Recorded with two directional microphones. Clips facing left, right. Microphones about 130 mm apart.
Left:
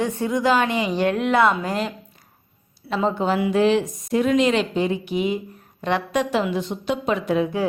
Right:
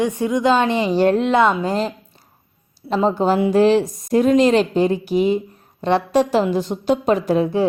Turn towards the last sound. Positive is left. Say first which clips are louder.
# right 4 dB
turn(degrees=-35)  # may be behind; listen again after turning